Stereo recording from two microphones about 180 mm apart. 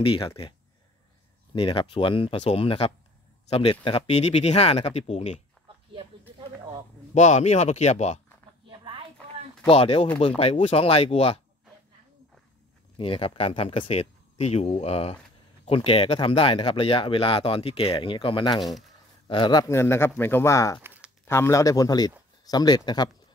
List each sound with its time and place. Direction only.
0.0 s speech: 30° left (ahead or behind)
1.5 s speech: 30° left (ahead or behind)
7.2 s speech: 40° left (ahead or behind)
8.6 s a sound: 30° right (ahead or behind)
9.7 s speech: 30° left (ahead or behind)
12.9 s speech: 30° left (ahead or behind)
18.6 s speech: centre (ahead or behind)
19.2 s speech: 25° left (ahead or behind)
20.8 s a sound: 10° right (ahead or behind)
21.3 s speech: 15° left (ahead or behind)